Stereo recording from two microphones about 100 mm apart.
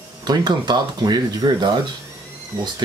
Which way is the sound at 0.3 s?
45° right (ahead or behind).